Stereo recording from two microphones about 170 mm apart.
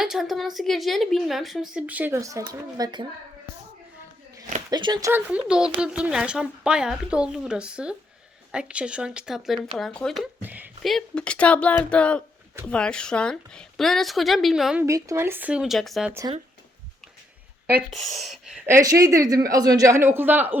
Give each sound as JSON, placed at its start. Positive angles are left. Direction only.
{"t": 0.0, "sound": "speech", "side_deg": 0}
{"t": 4.7, "sound": "speech", "side_deg": -25}
{"t": 5.3, "sound": "speech", "side_deg": -5}
{"t": 10.4, "sound": "speech", "side_deg": -10}
{"t": 10.8, "sound": "speech", "side_deg": 5}
{"t": 14.8, "sound": "speech", "side_deg": -20}
{"t": 17.9, "sound": "speech", "side_deg": 0}
{"t": 18.9, "sound": "speech", "side_deg": -20}